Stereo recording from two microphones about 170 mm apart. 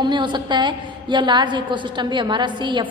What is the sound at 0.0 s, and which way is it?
A woman's voice, 25° right (ahead or behind).